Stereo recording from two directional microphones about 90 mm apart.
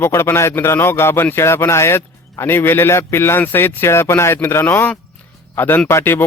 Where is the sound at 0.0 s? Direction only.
25° left (ahead or behind).